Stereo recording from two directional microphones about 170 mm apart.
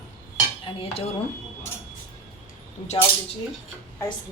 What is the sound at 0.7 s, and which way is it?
Dishes, 30° left (ahead or behind).